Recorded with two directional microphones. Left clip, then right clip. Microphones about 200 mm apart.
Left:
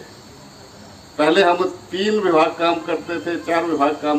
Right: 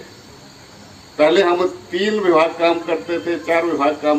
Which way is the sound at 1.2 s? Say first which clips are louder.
Right 1 dB; 15° left (ahead or behind).